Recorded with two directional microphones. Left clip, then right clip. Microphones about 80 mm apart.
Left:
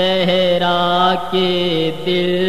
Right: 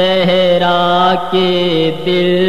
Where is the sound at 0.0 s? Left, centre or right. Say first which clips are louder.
Right 4 dB; left.